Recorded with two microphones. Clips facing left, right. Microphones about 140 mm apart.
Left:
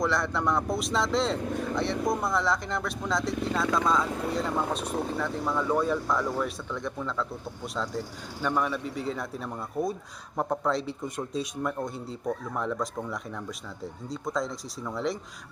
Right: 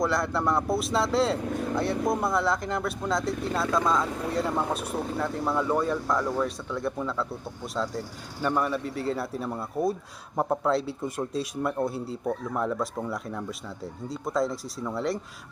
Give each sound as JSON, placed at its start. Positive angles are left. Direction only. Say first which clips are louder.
{"t": 0.0, "sound": "speech", "louder": "right 1 dB", "side_deg": 0}